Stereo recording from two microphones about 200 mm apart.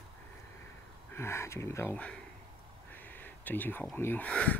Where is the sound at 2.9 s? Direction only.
10° left (ahead or behind).